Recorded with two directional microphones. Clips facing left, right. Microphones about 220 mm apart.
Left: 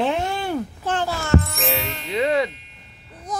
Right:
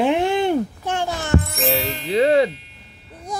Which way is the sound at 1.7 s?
30° right (ahead or behind).